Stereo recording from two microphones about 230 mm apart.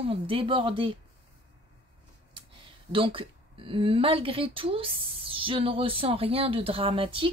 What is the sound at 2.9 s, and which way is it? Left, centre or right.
Speech, right.